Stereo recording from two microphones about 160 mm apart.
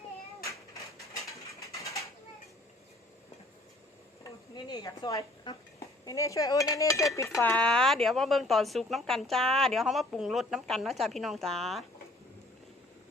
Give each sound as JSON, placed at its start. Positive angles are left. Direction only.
{"t": 1.6, "sound": "bird", "side_deg": 20}
{"t": 4.2, "sound": "speech", "side_deg": 25}